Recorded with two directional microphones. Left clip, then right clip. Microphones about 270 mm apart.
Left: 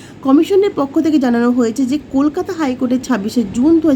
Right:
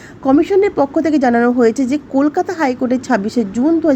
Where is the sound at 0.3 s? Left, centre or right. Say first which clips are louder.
Even; centre.